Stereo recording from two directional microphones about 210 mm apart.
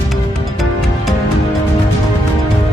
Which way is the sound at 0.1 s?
Centre (ahead or behind).